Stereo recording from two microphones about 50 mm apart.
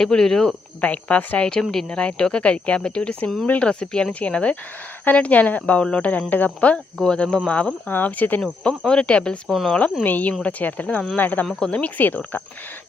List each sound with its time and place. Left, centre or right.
0.0 s speech: centre
0.8 s speech: left
3.4 s speech: left
3.7 s speech: centre
7.0 s speech: centre
7.9 s speech: left
8.8 s speech: centre
9.5 s speech: centre
10.0 s speech: left